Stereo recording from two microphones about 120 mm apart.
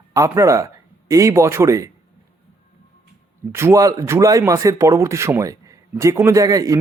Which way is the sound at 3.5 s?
25° right (ahead or behind).